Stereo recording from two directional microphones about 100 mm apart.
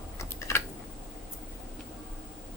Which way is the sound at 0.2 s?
30° left (ahead or behind).